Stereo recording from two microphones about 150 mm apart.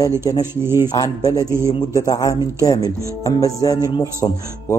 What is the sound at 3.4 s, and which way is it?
Speech, 25° left (ahead or behind).